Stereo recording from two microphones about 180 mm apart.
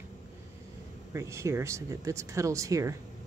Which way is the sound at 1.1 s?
15° right (ahead or behind).